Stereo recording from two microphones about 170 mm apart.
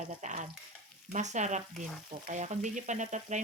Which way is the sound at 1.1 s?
45° right (ahead or behind).